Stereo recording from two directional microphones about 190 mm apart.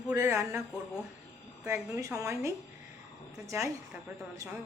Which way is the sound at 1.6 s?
15° right (ahead or behind).